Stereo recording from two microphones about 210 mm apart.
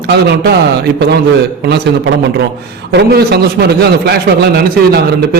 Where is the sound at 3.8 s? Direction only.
50° right (ahead or behind).